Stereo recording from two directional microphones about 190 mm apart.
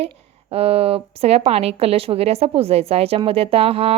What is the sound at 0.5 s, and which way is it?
A woman's voice, 30° right (ahead or behind).